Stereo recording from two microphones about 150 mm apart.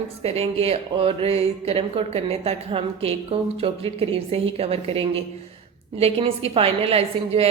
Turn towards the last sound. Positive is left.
turn(degrees=-40)  # may be behind; listen again after turning